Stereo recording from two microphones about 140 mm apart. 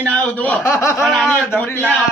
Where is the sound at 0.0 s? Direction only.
10° left (ahead or behind).